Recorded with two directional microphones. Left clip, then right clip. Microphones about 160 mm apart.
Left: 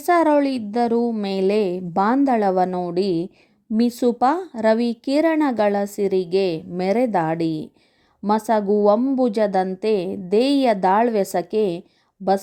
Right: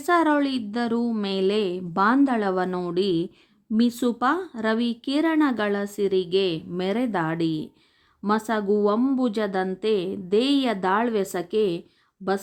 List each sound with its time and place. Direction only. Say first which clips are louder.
0.0 s a woman's voice: left 4 dB; 20° left (ahead or behind)
2.6 s a woman's voice: left 4 dB; 15° left (ahead or behind)
2.9 s a woman's voice: left 2 dB; 25° left (ahead or behind)